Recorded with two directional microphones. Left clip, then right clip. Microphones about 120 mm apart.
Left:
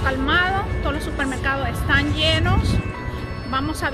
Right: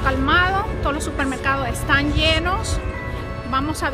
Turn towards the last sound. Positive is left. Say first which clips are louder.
# right 2 dB
turn(degrees=-15)  # may be behind; listen again after turning